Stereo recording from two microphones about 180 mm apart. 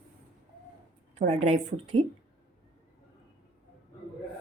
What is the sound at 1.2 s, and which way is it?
Speech, 40° right (ahead or behind).